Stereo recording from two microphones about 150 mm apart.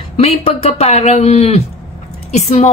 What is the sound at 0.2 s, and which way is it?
Speech, 40° left (ahead or behind).